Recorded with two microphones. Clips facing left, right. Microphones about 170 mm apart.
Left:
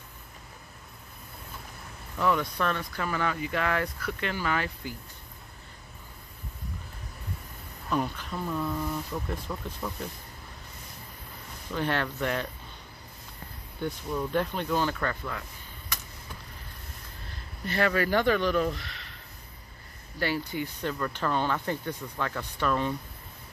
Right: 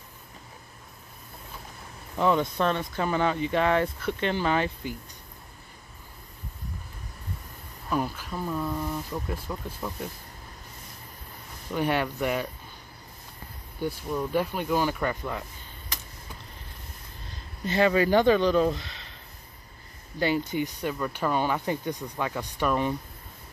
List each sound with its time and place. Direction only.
2.1 s speech: 20° right (ahead or behind)
7.9 s speech: 5° right (ahead or behind)
11.7 s speech: 15° right (ahead or behind)
13.7 s speech: 10° right (ahead or behind)
17.6 s speech: 20° right (ahead or behind)
20.2 s speech: 20° right (ahead or behind)